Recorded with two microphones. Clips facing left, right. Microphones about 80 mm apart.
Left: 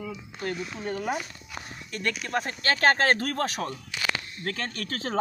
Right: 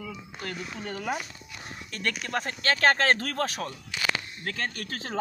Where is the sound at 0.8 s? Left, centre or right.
Centre.